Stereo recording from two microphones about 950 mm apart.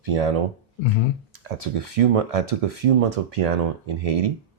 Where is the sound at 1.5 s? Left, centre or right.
Right.